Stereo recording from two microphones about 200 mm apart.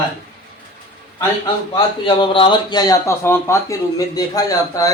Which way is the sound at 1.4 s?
25° left (ahead or behind).